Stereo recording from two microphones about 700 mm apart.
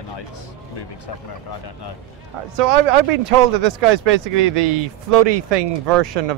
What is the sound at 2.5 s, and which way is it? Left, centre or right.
Speech, right.